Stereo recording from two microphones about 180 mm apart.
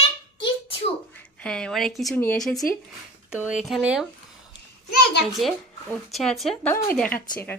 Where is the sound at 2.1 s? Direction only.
5° left (ahead or behind).